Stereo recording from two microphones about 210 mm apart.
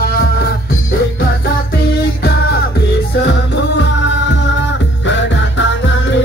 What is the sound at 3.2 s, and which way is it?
Music, 55° left (ahead or behind).